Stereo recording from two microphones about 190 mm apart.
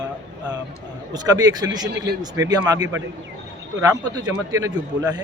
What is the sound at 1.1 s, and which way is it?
A man's voice, 20° right (ahead or behind).